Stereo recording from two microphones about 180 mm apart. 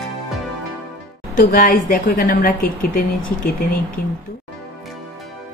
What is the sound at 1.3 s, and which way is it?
A woman's voice, 50° left (ahead or behind).